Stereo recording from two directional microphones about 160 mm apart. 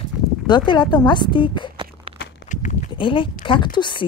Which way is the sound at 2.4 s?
50° left (ahead or behind).